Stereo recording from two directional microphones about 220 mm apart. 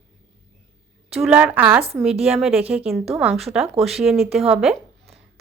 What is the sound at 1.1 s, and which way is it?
A woman's voice, 5° right (ahead or behind).